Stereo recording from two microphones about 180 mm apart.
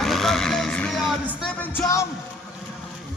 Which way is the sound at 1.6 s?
10° left (ahead or behind).